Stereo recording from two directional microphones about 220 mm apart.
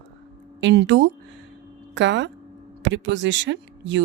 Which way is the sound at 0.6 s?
55° right (ahead or behind).